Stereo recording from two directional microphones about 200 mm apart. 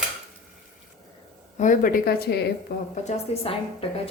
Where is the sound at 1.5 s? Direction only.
40° left (ahead or behind).